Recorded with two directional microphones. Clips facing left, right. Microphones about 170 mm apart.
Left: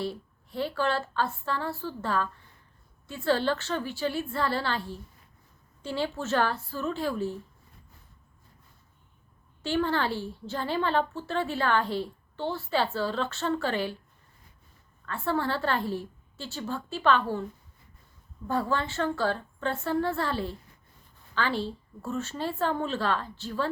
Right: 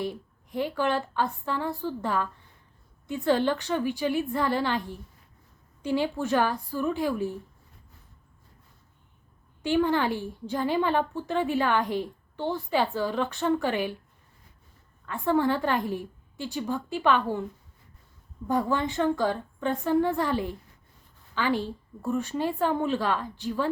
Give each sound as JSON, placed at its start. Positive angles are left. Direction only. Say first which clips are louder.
{"t": 0.0, "sound": "a woman's voice", "louder": "right 1 dB", "side_deg": -15}
{"t": 9.6, "sound": "a woman's voice", "louder": "right 3 dB", "side_deg": -15}
{"t": 15.0, "sound": "a woman's voice", "louder": "right 5 dB", "side_deg": -15}
{"t": 18.4, "sound": "a woman's voice", "louder": "right 3 dB", "side_deg": -15}